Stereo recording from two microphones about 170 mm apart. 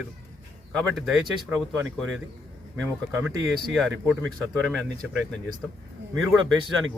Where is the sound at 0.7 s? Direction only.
Centre (ahead or behind).